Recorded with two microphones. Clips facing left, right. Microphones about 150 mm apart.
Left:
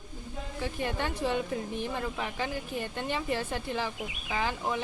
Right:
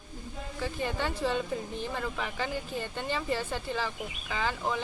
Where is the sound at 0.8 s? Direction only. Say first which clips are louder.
Even; 15° left (ahead or behind).